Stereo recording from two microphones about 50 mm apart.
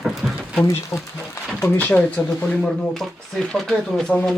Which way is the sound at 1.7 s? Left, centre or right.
Left.